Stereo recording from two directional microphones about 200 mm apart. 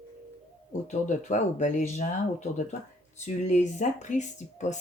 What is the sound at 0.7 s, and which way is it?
Speech, 35° left (ahead or behind).